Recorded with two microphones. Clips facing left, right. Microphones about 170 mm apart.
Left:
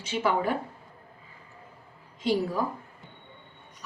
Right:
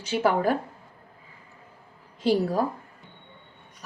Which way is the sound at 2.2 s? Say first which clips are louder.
Right 4 dB; 35° right (ahead or behind).